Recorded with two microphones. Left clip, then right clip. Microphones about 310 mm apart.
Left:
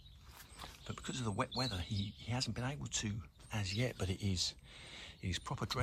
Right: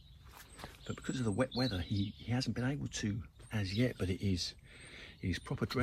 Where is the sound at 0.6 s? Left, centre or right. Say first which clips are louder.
Right 3 dB; centre.